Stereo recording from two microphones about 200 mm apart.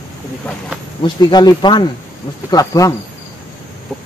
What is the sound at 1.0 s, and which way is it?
Speech, 20° left (ahead or behind).